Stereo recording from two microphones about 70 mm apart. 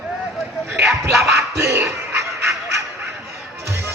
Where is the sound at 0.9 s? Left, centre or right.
Centre.